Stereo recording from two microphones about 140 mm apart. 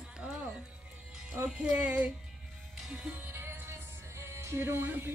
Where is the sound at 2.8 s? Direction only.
10° right (ahead or behind).